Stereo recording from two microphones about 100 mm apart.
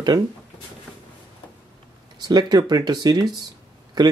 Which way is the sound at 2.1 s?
45° right (ahead or behind).